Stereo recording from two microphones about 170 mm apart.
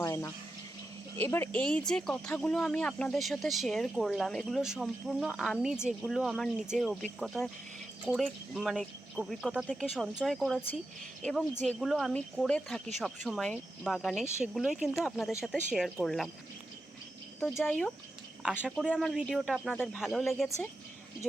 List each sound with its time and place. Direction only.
0.0 s a sound: 15° left (ahead or behind)
1.2 s speech: 10° left (ahead or behind)
15.3 s speech: 15° left (ahead or behind)
15.7 s speech: centre (ahead or behind)
17.7 s speech: 5° left (ahead or behind)
19.7 s speech: 10° left (ahead or behind)
20.0 s speech: centre (ahead or behind)